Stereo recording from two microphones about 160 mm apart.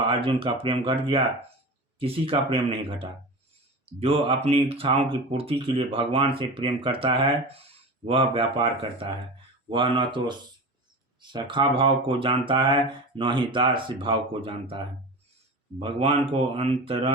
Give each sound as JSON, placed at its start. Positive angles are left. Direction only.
{"t": 0.0, "sound": "speech", "side_deg": -35}